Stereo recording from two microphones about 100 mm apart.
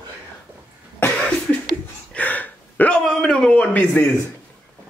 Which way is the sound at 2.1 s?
15° left (ahead or behind).